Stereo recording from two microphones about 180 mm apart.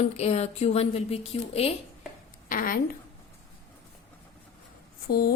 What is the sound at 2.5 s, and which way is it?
Speech, 50° left (ahead or behind).